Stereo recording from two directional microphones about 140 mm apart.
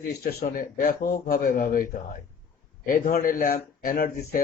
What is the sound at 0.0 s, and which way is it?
Speech, 90° left.